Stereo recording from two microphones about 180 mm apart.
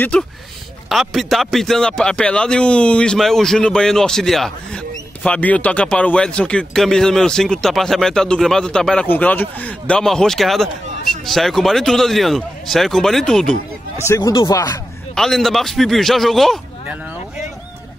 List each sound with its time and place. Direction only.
0.1 s a man's voice: 5° left (ahead or behind)
14.0 s speech: 20° left (ahead or behind)
15.1 s a man's voice: centre (ahead or behind)